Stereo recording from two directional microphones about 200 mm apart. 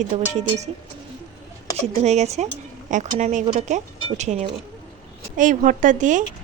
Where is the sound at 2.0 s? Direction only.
35° right (ahead or behind).